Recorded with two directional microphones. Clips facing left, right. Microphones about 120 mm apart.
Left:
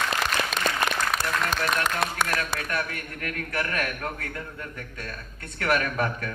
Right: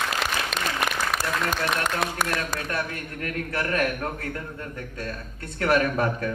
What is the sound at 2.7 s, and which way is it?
Speech, 25° right (ahead or behind).